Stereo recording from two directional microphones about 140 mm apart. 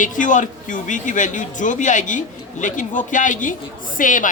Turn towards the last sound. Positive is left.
turn(degrees=70)  # may be behind; listen again after turning